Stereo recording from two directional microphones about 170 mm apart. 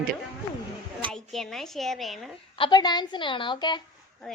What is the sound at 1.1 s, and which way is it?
Speech, centre (ahead or behind).